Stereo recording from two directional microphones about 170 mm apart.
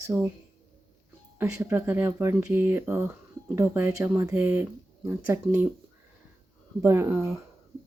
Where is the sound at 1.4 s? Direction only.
15° right (ahead or behind).